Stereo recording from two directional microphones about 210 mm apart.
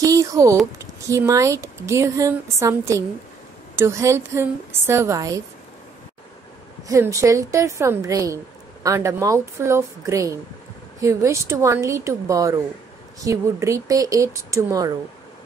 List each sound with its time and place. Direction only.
0.0 s speech: 15° right (ahead or behind)
6.9 s speech: 15° right (ahead or behind)